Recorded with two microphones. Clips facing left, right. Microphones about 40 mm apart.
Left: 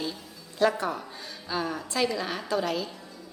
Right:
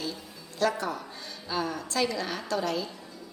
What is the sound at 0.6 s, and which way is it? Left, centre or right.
A woman's voice, centre.